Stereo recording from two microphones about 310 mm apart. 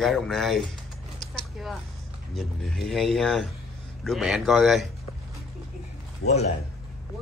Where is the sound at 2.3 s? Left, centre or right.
Centre.